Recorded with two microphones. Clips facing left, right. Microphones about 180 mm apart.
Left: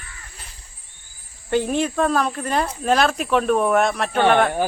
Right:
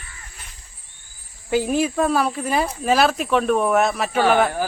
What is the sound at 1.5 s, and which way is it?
Speech, 5° right (ahead or behind).